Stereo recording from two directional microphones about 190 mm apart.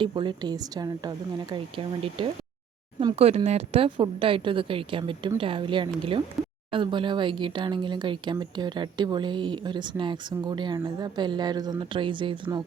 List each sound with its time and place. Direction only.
0.0 s speech: 25° right (ahead or behind)